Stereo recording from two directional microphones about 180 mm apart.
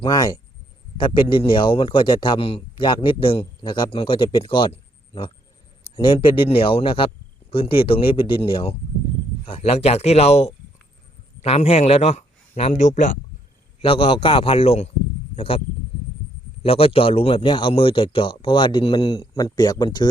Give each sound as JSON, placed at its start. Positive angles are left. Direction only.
{"t": 0.0, "sound": "a man's voice", "side_deg": 20}
{"t": 13.8, "sound": "a man's voice", "side_deg": 30}
{"t": 16.6, "sound": "a man's voice", "side_deg": 35}